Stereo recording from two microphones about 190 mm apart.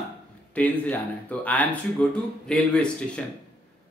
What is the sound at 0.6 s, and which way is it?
Speech, 5° left (ahead or behind).